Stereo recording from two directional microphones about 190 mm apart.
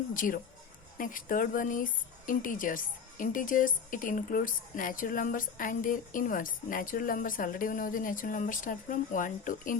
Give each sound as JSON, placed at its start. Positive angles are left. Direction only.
{"t": 0.1, "sound": "speech", "side_deg": 45}